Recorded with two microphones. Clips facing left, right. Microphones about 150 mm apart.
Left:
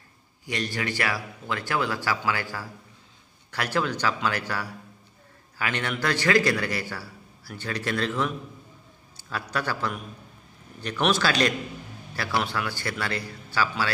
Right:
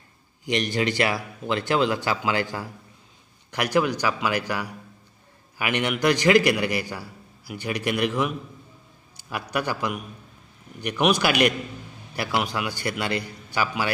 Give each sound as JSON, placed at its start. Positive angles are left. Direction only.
{"t": 0.5, "sound": "a man's voice", "side_deg": -20}